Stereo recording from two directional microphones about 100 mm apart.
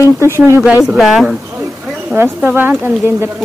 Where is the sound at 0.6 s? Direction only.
10° right (ahead or behind).